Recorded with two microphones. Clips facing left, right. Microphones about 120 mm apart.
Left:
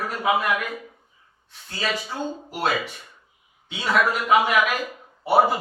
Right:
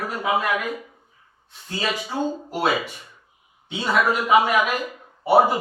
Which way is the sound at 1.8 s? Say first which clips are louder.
Right 2 dB; 20° right (ahead or behind).